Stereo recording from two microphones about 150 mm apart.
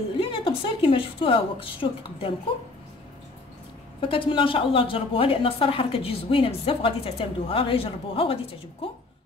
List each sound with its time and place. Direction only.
0.2 s a woman's voice: 40° left (ahead or behind)
4.1 s a woman's voice: 35° left (ahead or behind)